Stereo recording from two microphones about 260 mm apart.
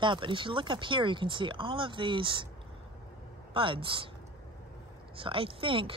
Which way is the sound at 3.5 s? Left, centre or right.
Centre.